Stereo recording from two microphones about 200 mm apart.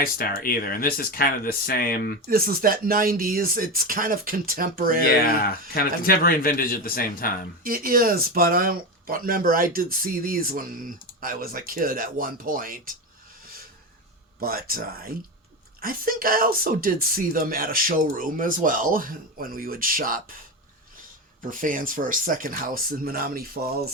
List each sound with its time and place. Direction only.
0.0 s speech: 45° left (ahead or behind)
2.2 s speech: 45° right (ahead or behind)
5.0 s speech: 50° left (ahead or behind)
7.6 s speech: 45° right (ahead or behind)
14.4 s speech: 45° right (ahead or behind)
21.5 s speech: 45° right (ahead or behind)